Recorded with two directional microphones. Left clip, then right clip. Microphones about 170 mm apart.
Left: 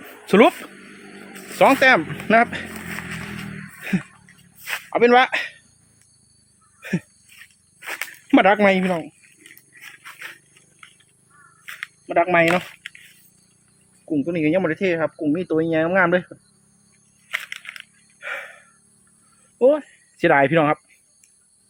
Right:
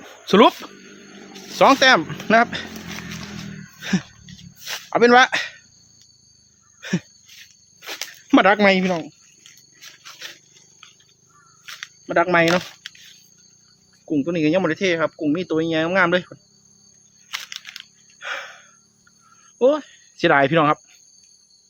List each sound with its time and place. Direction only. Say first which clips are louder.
0.3 s speech: right 1 dB; centre (ahead or behind)
3.8 s music: right 2 dB; 15° right (ahead or behind)
4.6 s a sound: right 1 dB; 15° right (ahead or behind)
7.8 s snake: left 2 dB; 5° right (ahead or behind)
10.0 s wild animals: even; 5° left (ahead or behind)
12.0 s speech: even; 25° right (ahead or behind)
14.1 s speech: right 1 dB; 15° right (ahead or behind); by 16.4 s 10° left (ahead or behind)
18.2 s a sound: right 1 dB; 5° right (ahead or behind)
19.5 s speech: left 1 dB; 5° right (ahead or behind)